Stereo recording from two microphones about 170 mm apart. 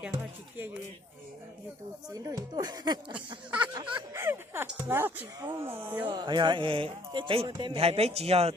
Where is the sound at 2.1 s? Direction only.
20° right (ahead or behind).